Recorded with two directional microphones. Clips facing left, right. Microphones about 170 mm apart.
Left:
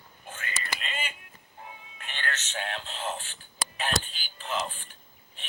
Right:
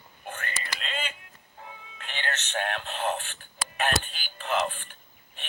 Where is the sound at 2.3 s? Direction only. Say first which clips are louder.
Right 4 dB; 60° right (ahead or behind).